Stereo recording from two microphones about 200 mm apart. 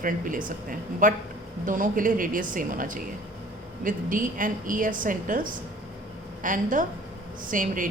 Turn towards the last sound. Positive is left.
turn(degrees=-40)  # may be behind; listen again after turning